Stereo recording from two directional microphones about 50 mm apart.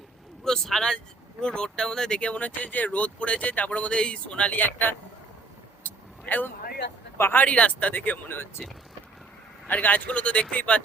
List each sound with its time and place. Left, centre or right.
0.4 s speech: centre; by 3.7 s left
3.7 s speech: left
4.6 s a man's voice: left
5.8 s vehicle: left
7.2 s a man's voice: left
7.4 s speech: left
9.6 s speech: left